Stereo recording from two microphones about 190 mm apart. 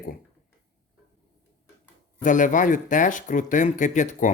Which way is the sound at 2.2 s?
45° left (ahead or behind).